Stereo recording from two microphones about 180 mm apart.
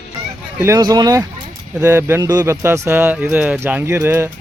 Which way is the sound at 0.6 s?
20° right (ahead or behind).